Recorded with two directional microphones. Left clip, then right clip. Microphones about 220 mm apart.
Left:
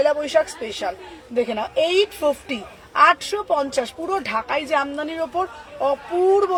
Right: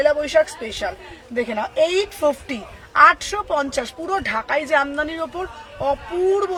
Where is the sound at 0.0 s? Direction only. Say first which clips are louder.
Right 2 dB; 15° right (ahead or behind).